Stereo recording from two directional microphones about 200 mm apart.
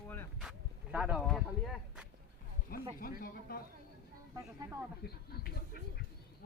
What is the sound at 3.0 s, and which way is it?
Speech, 45° left (ahead or behind).